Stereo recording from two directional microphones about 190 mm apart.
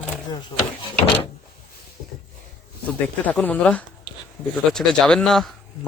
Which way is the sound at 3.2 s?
10° left (ahead or behind).